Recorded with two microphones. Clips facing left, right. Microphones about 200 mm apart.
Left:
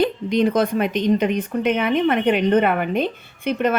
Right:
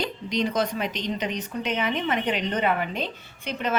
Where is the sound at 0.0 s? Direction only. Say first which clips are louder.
Left 9 dB; 55° left (ahead or behind).